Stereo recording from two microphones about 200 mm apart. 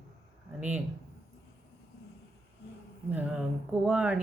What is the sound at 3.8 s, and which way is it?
Speech, 5° right (ahead or behind).